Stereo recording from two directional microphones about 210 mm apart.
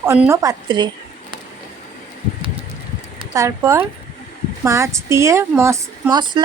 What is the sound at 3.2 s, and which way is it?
A woman's voice, 15° right (ahead or behind).